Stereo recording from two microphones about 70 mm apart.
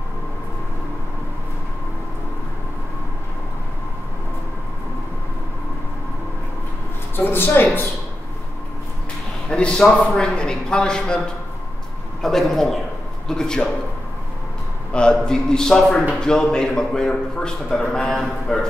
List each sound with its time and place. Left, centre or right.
7.2 s speech: left
9.5 s a man's voice: centre
12.2 s a man's voice: centre
14.9 s a man's voice: centre